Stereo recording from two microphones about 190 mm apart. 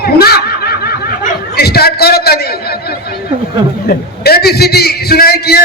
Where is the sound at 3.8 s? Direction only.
55° left (ahead or behind).